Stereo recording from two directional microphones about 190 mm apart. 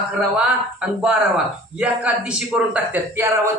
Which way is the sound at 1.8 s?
5° right (ahead or behind).